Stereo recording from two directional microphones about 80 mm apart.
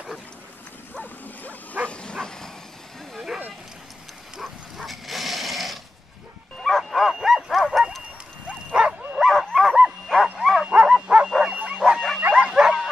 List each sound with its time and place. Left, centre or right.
0.9 s dog: centre
4.4 s a sound: centre
6.6 s bow-wow: centre
8.7 s dog: centre
9.2 s bow-wow: centre
9.8 s dog: centre
10.4 s bow-wow: centre
10.7 s bow-wow: centre